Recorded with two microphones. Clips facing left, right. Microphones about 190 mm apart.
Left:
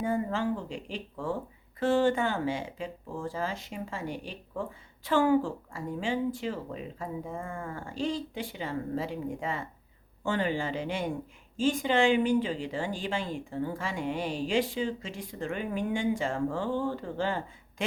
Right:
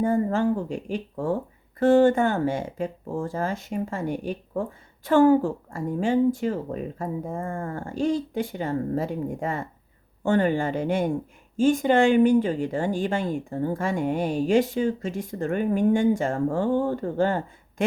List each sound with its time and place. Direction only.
0.0 s speech: 45° right (ahead or behind)